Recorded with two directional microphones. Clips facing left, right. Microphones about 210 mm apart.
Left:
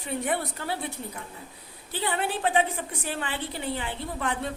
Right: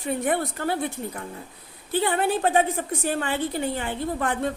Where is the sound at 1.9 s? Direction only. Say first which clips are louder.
Right 6 dB; 50° right (ahead or behind).